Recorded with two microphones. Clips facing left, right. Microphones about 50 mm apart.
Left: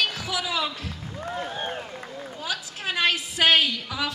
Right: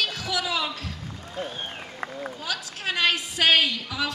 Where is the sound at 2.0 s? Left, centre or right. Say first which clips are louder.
Right 5 dB; right.